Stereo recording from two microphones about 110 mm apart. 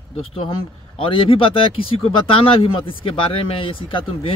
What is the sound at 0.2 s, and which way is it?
Speech, 55° left (ahead or behind).